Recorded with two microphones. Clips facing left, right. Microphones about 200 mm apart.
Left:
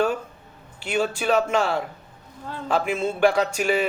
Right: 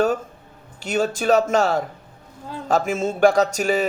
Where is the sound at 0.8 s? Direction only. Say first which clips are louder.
Right 2 dB; 45° right (ahead or behind).